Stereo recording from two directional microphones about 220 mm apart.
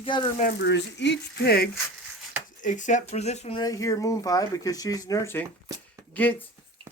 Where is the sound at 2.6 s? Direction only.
35° left (ahead or behind).